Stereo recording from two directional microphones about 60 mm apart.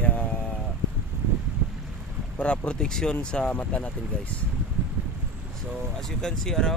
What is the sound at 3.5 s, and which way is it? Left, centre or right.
Speech, left.